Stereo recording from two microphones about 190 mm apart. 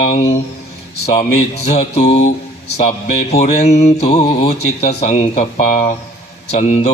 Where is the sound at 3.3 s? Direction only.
35° left (ahead or behind).